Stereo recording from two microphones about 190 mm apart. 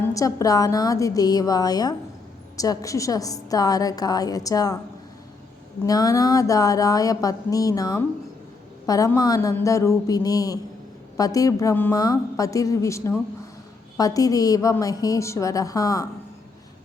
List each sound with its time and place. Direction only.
0.1 s a woman's voice: 15° left (ahead or behind)
5.8 s speech: 20° left (ahead or behind)